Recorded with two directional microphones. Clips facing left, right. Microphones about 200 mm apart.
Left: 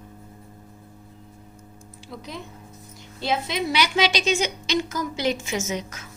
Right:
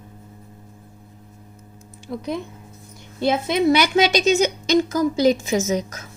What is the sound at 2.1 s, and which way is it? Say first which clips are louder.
A woman's voice: right 10 dB; 55° right (ahead or behind).